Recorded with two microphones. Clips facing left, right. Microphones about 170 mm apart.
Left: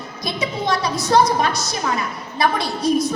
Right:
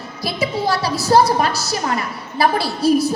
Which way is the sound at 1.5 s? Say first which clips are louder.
Right 2 dB; 5° right (ahead or behind).